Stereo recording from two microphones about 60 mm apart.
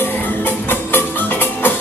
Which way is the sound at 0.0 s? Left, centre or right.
Left.